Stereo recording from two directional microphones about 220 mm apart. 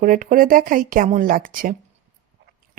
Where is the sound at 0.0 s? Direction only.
40° right (ahead or behind).